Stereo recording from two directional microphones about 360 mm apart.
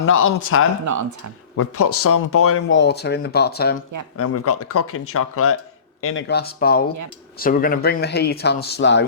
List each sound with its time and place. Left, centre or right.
0.0 s speech: left
4.2 s speech: left